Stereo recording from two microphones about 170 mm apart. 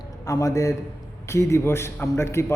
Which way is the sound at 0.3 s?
20° left (ahead or behind).